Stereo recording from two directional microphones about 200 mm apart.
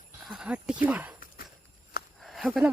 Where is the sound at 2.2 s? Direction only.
Centre (ahead or behind).